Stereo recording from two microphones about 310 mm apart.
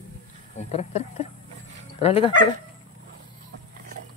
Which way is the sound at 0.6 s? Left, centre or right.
Left.